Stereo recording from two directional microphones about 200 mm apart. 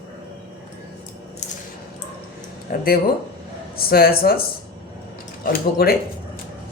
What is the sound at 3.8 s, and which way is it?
Speech, 50° left (ahead or behind).